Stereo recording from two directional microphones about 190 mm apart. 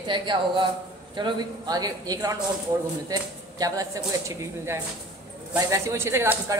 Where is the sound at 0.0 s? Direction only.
25° right (ahead or behind).